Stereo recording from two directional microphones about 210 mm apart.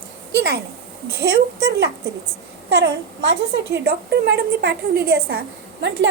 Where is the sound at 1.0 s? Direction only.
50° right (ahead or behind).